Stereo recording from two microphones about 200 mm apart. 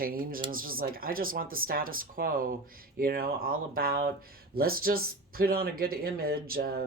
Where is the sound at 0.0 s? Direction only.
45° right (ahead or behind).